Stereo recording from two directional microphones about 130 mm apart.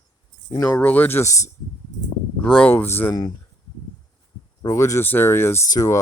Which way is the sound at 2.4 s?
5° left (ahead or behind).